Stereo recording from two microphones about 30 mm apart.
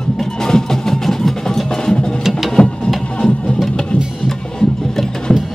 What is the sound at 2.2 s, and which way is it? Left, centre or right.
Music, centre.